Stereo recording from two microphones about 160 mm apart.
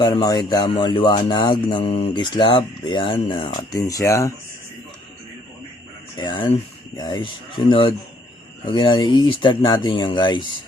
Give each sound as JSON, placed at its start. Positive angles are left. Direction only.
{"t": 0.0, "sound": "speech", "side_deg": 25}
{"t": 6.1, "sound": "speech", "side_deg": 30}